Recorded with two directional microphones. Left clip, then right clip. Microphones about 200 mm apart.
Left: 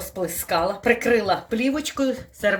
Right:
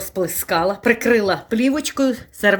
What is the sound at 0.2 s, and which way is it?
Speech, 60° right (ahead or behind).